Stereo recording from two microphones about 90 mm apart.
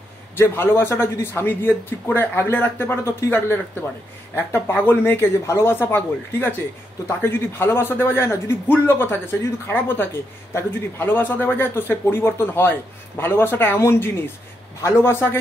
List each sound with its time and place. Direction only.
0.4 s speech: 25° left (ahead or behind)